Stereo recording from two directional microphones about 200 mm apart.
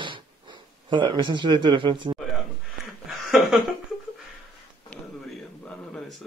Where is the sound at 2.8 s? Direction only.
Centre (ahead or behind).